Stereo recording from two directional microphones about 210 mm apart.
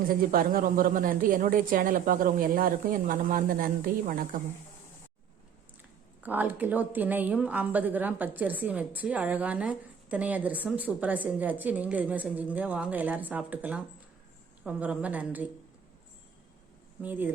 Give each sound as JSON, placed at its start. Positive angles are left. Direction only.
{"t": 0.1, "sound": "speech", "side_deg": -40}
{"t": 6.2, "sound": "a woman's voice", "side_deg": -10}
{"t": 17.0, "sound": "a woman's voice", "side_deg": -10}